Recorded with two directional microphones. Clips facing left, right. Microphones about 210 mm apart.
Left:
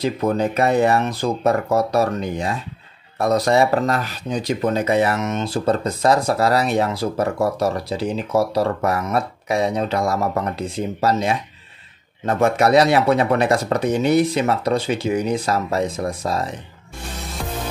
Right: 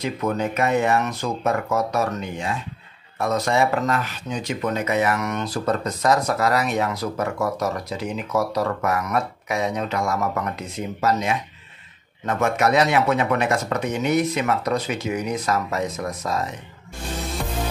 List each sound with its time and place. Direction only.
0.0 s speech: 35° left (ahead or behind)